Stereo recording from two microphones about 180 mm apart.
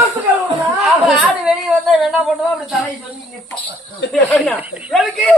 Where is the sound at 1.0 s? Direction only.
5° right (ahead or behind).